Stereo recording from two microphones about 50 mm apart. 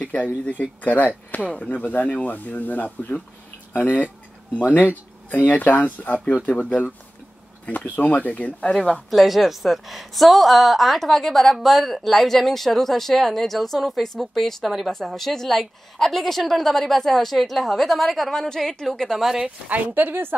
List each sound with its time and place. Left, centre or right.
0.0 s speech: left
7.7 s speech: left
9.1 s speech: centre
19.1 s speech: centre
19.7 s speech: right